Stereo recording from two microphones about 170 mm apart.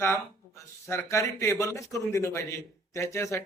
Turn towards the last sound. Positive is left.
turn(degrees=15)  # may be behind; listen again after turning